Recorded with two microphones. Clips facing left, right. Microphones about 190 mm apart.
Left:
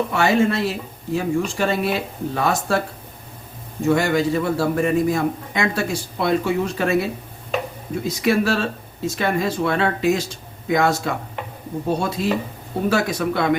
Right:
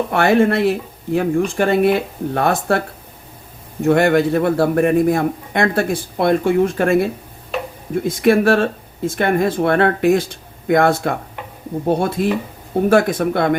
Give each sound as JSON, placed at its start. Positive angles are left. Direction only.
{"t": 0.1, "sound": "a man's voice", "side_deg": -55}
{"t": 3.8, "sound": "a man's voice", "side_deg": -60}